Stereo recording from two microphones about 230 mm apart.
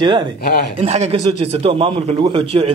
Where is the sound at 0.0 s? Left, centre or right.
Centre.